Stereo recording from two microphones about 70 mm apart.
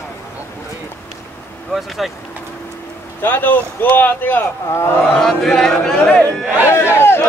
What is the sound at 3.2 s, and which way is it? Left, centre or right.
Speech, left.